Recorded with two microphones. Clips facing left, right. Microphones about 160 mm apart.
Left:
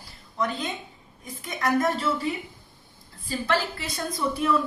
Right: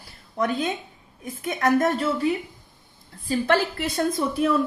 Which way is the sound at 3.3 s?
50° right (ahead or behind).